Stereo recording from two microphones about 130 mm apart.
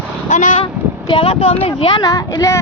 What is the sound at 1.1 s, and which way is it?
Speech, 45° left (ahead or behind).